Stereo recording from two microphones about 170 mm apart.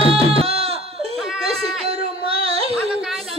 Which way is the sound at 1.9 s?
35° right (ahead or behind).